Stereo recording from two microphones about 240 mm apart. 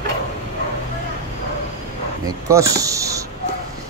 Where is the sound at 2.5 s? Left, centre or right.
Centre.